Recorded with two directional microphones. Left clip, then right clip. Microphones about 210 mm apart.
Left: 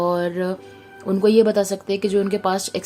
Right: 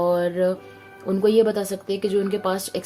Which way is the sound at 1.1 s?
20° left (ahead or behind).